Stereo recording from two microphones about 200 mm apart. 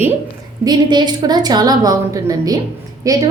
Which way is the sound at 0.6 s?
20° right (ahead or behind).